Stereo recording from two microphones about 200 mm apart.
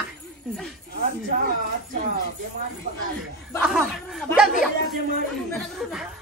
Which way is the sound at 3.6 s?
Centre (ahead or behind).